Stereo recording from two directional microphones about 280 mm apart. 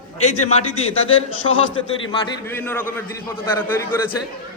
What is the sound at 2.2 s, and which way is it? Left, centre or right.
A man's voice, centre.